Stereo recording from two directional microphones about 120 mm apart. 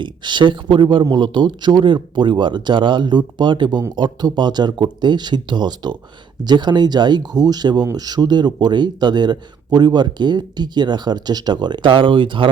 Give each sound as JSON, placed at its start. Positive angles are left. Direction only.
{"t": 0.0, "sound": "speech", "side_deg": -40}